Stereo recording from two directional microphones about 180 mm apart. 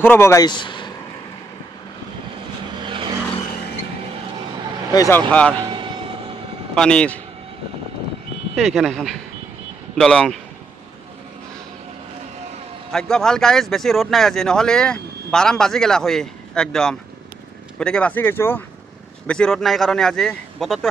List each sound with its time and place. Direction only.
0.0 s speech: 15° left (ahead or behind)
2.8 s vehicle: 25° right (ahead or behind)
5.3 s speech: 5° left (ahead or behind)
5.6 s vehicle: 25° right (ahead or behind)
6.7 s speech: 5° left (ahead or behind)
8.5 s speech: centre (ahead or behind)
12.9 s speech: 5° left (ahead or behind)